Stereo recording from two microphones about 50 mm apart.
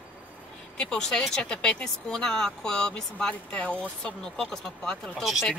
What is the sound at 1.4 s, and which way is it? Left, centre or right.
Speech, centre.